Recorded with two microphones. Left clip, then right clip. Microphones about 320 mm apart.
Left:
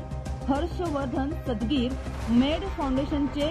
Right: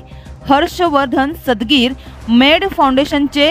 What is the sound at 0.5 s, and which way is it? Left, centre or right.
Speech, right.